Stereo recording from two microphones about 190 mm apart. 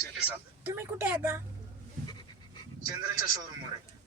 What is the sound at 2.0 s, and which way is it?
Pant, 20° left (ahead or behind).